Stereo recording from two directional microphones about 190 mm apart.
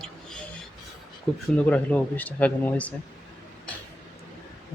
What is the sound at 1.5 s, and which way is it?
Speech, 5° left (ahead or behind).